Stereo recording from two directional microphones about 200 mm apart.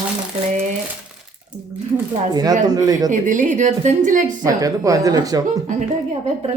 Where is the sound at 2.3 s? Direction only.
20° right (ahead or behind).